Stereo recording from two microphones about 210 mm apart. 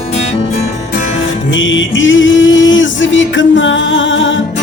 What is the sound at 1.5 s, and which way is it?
Music, 65° left (ahead or behind).